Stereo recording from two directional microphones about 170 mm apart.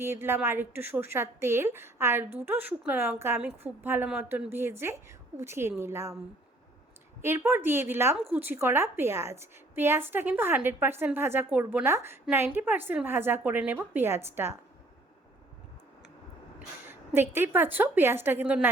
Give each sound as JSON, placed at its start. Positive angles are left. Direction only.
{"t": 0.0, "sound": "a woman's voice", "side_deg": -15}
{"t": 7.2, "sound": "a woman's voice", "side_deg": -15}
{"t": 16.6, "sound": "a woman's voice", "side_deg": -10}